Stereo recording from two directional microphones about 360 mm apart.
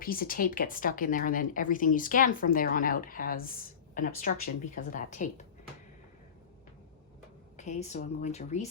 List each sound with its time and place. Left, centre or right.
0.0 s speech: left
7.5 s speech: centre